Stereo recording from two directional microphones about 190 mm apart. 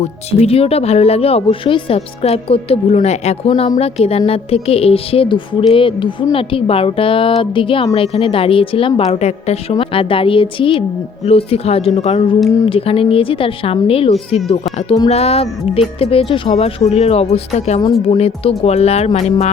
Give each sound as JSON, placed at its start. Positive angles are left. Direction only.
{"t": 0.3, "sound": "speech", "side_deg": 35}